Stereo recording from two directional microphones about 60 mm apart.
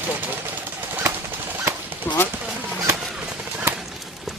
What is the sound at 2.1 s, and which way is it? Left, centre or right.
Speech, left.